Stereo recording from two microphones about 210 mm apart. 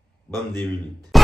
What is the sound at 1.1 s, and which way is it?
Music, centre (ahead or behind).